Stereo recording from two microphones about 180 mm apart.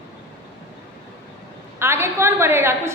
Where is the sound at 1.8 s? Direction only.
15° right (ahead or behind).